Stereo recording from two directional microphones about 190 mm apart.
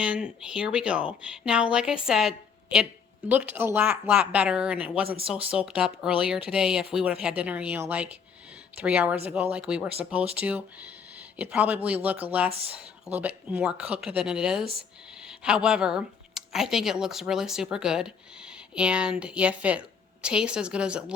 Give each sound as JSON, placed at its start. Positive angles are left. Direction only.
{"t": 0.0, "sound": "speech", "side_deg": -5}